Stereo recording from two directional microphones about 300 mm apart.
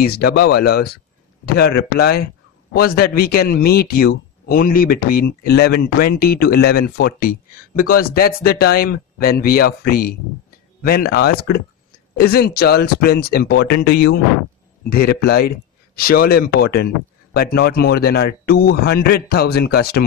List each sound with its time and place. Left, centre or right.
0.0 s a man's voice: left